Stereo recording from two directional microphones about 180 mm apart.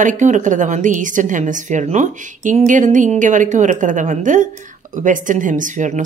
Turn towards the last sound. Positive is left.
turn(degrees=-45)  # may be behind; listen again after turning